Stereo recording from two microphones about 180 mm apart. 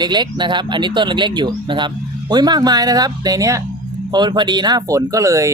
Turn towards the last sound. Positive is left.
turn(degrees=-15)  # may be behind; listen again after turning